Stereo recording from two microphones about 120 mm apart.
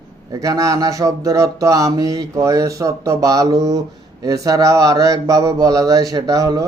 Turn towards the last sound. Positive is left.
turn(degrees=-30)  # may be behind; listen again after turning